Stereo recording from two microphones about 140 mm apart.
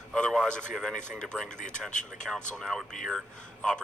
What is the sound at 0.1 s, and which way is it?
A man's voice, 5° left (ahead or behind).